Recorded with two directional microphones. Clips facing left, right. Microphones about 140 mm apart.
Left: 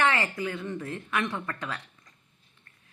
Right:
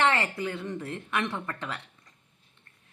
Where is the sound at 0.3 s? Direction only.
35° right (ahead or behind).